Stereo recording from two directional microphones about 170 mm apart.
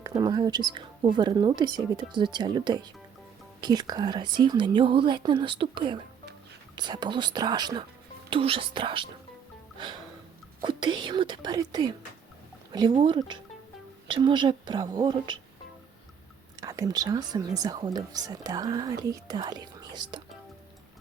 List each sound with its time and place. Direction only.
0.0 s speech: 25° right (ahead or behind)
16.6 s speech: 20° right (ahead or behind)